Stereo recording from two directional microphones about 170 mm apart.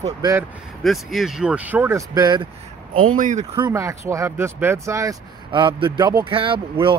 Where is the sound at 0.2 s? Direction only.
15° right (ahead or behind).